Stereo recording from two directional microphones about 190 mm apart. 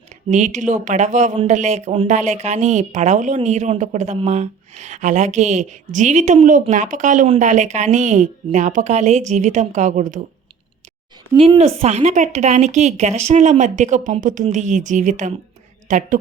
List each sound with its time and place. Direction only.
0.3 s speech: 40° right (ahead or behind)
11.3 s speech: 30° right (ahead or behind)